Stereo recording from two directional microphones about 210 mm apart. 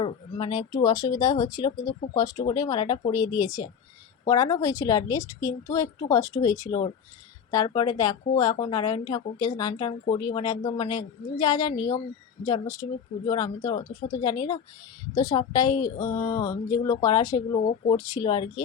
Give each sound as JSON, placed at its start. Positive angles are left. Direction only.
{"t": 0.0, "sound": "a woman's voice", "side_deg": 20}